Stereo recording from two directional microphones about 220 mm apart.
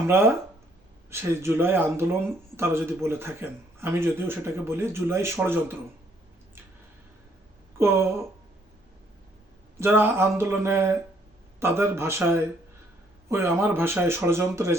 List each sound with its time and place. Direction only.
1.1 s speech: 10° right (ahead or behind)
7.8 s speech: 10° right (ahead or behind)
9.7 s speech: 10° right (ahead or behind)